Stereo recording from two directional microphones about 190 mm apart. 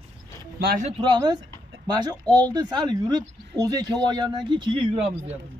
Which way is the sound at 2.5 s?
20° right (ahead or behind).